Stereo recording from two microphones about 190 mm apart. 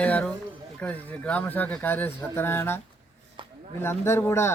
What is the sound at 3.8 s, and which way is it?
Speech, 15° left (ahead or behind).